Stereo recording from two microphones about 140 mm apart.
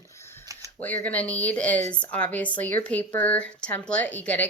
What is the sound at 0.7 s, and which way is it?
A woman's voice, 10° left (ahead or behind).